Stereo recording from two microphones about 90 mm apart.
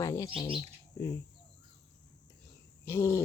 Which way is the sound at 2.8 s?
30° left (ahead or behind).